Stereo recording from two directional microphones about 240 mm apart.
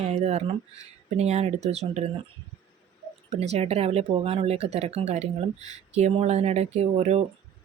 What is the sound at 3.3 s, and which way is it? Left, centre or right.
Speech, right.